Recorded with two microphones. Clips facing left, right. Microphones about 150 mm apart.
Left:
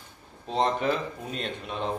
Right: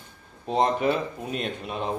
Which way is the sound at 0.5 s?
10° right (ahead or behind).